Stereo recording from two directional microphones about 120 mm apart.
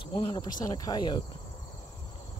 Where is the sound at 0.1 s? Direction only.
40° left (ahead or behind).